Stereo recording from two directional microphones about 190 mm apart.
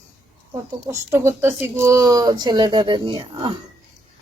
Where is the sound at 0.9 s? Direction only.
15° right (ahead or behind).